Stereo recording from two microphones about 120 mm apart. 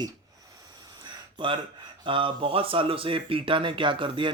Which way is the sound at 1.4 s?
40° right (ahead or behind).